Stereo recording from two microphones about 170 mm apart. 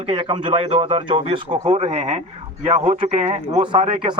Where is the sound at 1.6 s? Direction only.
45° right (ahead or behind); by 4.1 s 30° right (ahead or behind).